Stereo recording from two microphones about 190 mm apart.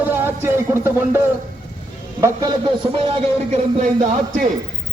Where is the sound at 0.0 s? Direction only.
10° right (ahead or behind).